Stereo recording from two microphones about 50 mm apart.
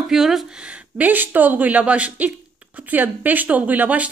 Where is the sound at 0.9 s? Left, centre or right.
Right.